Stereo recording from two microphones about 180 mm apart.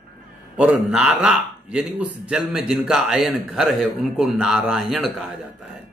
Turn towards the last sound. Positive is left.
turn(degrees=0)  # may be behind; listen again after turning